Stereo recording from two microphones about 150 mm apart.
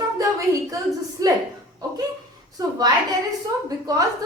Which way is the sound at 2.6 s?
25° right (ahead or behind).